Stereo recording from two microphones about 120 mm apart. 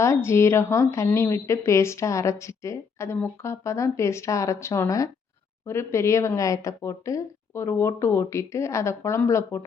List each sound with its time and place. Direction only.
0.0 s speech: 20° left (ahead or behind)